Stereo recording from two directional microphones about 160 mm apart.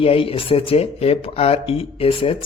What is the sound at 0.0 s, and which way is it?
Speech, 35° left (ahead or behind).